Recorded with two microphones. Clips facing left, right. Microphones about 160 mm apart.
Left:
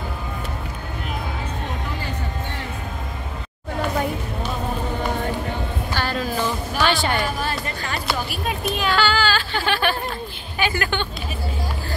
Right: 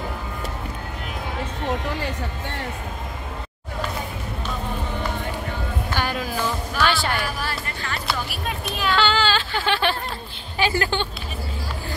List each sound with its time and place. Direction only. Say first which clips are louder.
5.9 s a sound: left 1 dB; 15° right (ahead or behind)
6.9 s speech: left 3 dB; centre (ahead or behind)
9.0 s speech: even; 25° right (ahead or behind)